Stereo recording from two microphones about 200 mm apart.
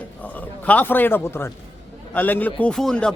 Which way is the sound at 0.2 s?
10° left (ahead or behind).